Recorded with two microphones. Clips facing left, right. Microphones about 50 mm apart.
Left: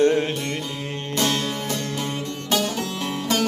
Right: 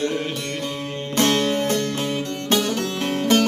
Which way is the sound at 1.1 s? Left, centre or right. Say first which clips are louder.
Right 5 dB; right.